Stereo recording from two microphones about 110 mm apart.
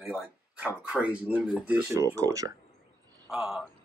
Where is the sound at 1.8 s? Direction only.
30° right (ahead or behind).